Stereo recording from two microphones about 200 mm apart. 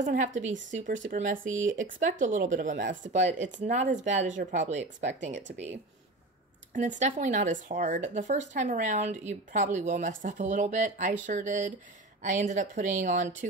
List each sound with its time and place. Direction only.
0.0 s speech: 40° right (ahead or behind)